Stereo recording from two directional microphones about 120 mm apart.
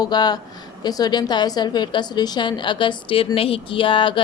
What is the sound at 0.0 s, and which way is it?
A woman's voice, 35° left (ahead or behind).